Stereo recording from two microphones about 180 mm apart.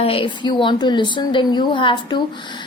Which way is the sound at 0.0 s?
30° left (ahead or behind).